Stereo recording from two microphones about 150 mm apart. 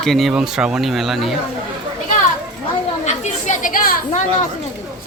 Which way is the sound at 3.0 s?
55° left (ahead or behind).